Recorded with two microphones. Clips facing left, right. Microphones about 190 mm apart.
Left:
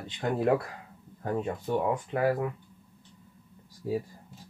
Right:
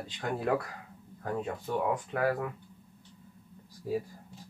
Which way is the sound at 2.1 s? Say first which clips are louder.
Left 3 dB; 20° left (ahead or behind).